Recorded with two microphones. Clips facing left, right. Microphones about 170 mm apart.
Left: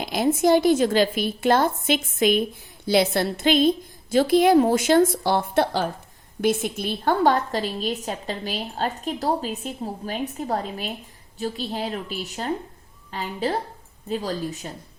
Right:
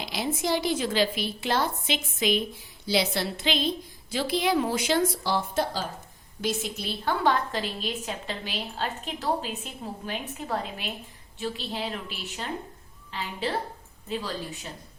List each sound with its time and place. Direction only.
0.0 s a woman's voice: 50° left (ahead or behind)